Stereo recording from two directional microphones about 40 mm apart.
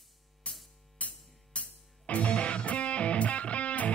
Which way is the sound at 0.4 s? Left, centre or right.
Left.